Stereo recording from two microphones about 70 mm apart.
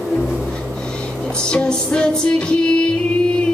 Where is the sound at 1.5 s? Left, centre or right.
Centre.